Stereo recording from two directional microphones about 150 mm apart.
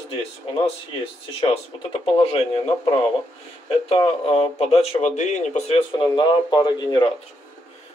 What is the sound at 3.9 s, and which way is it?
Speech, 40° left (ahead or behind).